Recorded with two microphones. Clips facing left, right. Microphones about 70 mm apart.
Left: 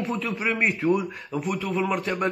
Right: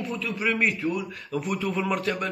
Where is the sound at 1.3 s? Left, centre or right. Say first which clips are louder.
Even; centre.